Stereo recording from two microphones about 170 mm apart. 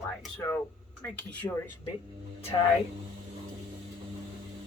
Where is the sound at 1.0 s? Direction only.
10° left (ahead or behind).